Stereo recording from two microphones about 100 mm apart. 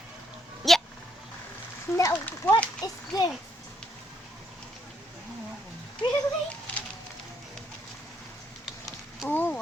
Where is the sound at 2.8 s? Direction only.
40° left (ahead or behind).